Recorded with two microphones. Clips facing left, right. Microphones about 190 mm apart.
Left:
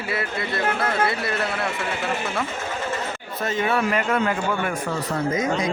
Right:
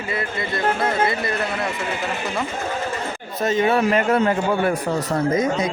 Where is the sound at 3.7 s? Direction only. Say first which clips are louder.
Right 3 dB; 30° right (ahead or behind).